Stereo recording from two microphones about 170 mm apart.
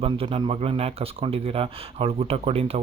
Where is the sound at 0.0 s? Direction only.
30° right (ahead or behind).